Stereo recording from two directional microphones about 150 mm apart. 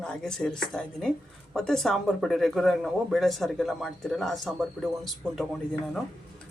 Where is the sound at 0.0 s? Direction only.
5° left (ahead or behind).